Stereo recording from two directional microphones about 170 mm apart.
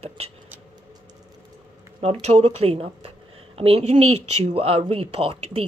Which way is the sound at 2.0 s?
40° right (ahead or behind).